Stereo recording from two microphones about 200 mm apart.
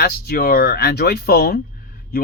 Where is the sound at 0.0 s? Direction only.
50° left (ahead or behind).